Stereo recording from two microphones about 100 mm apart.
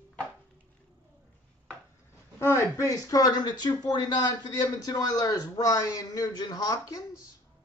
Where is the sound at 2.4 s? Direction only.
25° left (ahead or behind).